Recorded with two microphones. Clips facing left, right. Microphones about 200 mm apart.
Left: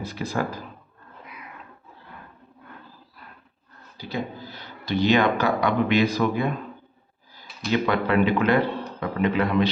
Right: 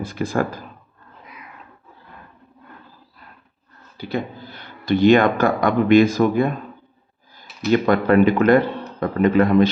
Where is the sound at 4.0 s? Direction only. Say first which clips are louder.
Right 4 dB; 55° right (ahead or behind).